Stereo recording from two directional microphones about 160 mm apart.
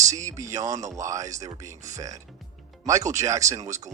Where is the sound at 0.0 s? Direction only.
20° right (ahead or behind).